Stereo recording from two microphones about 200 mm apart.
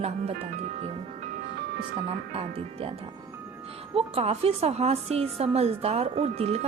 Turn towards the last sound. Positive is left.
turn(degrees=-30)  # may be behind; listen again after turning